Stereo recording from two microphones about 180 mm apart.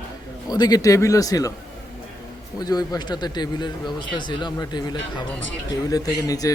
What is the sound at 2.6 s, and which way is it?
A man's voice, 20° left (ahead or behind).